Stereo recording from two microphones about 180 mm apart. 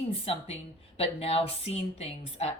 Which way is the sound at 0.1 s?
30° left (ahead or behind).